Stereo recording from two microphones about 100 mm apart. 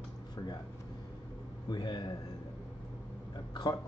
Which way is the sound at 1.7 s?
50° left (ahead or behind).